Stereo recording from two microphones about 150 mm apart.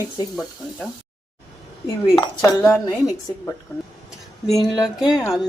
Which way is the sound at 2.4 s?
15° left (ahead or behind).